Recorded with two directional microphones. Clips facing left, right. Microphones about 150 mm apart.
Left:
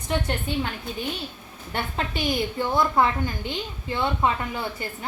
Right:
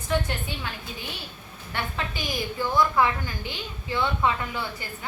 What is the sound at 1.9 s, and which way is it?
Speech, 25° left (ahead or behind).